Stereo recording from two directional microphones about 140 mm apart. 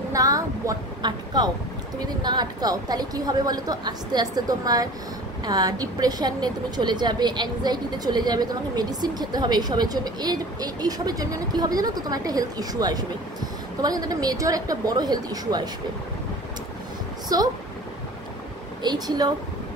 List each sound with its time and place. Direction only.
0.1 s a sound: 25° right (ahead or behind)
2.2 s a woman's voice: 30° right (ahead or behind)
17.3 s a woman's voice: 25° right (ahead or behind)
18.8 s a woman's voice: 30° right (ahead or behind)